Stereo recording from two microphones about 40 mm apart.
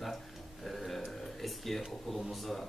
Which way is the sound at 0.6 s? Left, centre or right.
Centre.